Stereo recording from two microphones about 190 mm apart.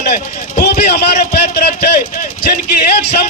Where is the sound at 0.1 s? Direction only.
55° left (ahead or behind).